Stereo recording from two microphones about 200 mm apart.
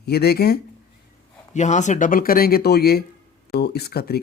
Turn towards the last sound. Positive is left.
turn(degrees=50)  # may be behind; listen again after turning